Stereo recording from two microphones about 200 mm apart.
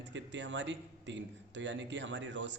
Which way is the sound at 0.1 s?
65° right (ahead or behind).